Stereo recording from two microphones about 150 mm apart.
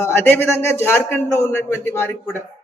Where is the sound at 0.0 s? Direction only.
15° left (ahead or behind).